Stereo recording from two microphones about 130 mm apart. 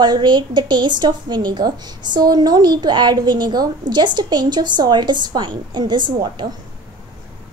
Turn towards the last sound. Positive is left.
turn(degrees=-35)  # may be behind; listen again after turning